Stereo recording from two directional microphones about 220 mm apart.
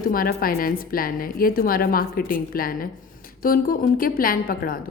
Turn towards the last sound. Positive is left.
turn(degrees=40)  # may be behind; listen again after turning